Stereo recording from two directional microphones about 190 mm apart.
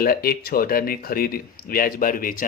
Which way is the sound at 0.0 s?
50° left (ahead or behind).